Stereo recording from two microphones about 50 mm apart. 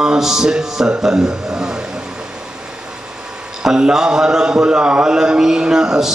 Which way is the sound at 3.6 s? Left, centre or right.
Centre.